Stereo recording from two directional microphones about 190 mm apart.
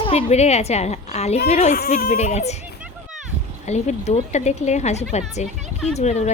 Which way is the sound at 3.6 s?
35° left (ahead or behind).